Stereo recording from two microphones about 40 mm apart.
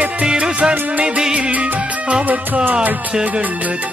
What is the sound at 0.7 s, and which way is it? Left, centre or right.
Music, right.